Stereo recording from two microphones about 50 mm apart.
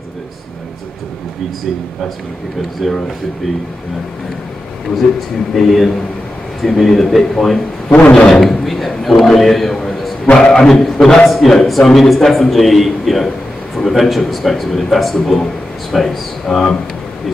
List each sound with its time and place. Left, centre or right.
2.8 s a man's voice: centre
5.5 s a man's voice: centre
7.9 s speech: centre
8.3 s a man's voice: centre
10.3 s a man's voice: centre